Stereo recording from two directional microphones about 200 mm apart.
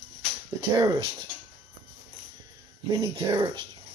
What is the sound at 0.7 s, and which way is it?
Speech, 25° right (ahead or behind).